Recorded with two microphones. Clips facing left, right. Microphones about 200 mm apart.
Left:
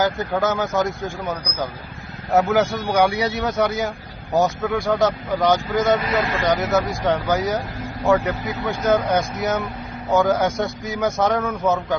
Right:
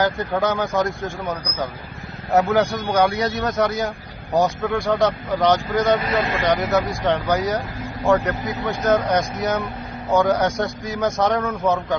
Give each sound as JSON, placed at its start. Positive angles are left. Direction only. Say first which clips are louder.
{"t": 0.3, "sound": "speech", "louder": "even", "side_deg": 5}
{"t": 6.1, "sound": "speech", "louder": "even", "side_deg": -25}
{"t": 6.5, "sound": "speech", "louder": "even", "side_deg": 0}